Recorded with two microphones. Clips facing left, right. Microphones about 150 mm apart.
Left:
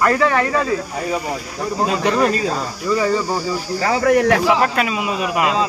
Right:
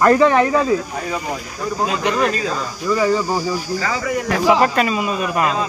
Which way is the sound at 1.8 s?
35° left (ahead or behind).